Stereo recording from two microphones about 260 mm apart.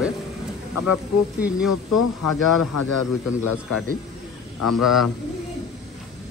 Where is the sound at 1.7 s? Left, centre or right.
Left.